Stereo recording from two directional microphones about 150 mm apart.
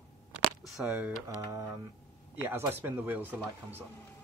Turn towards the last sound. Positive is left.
turn(degrees=-15)  # may be behind; listen again after turning